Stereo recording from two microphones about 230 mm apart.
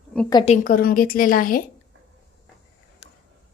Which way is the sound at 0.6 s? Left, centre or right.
Left.